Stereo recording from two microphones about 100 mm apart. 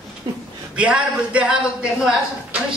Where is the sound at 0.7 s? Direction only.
10° right (ahead or behind).